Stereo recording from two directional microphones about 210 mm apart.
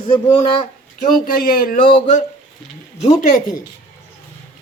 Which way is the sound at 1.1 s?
40° left (ahead or behind).